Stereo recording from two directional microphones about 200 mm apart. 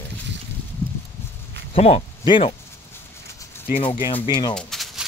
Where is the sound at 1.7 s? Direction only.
30° left (ahead or behind).